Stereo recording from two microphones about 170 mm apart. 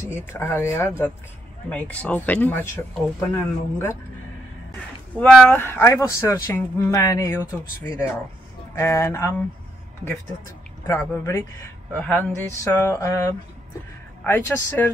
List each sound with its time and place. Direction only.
0.1 s speech: 15° left (ahead or behind)
5.1 s speech: 5° left (ahead or behind)
8.7 s speech: 15° left (ahead or behind)
10.9 s speech: 15° left (ahead or behind)